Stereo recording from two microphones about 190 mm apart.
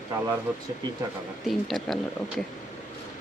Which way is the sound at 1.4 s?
Centre (ahead or behind).